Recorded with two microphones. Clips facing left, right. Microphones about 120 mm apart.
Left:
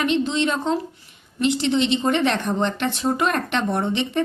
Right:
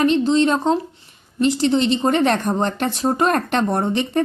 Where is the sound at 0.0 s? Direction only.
35° right (ahead or behind).